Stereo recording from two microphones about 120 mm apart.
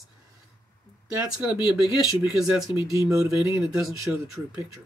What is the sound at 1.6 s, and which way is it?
Speech, 45° left (ahead or behind).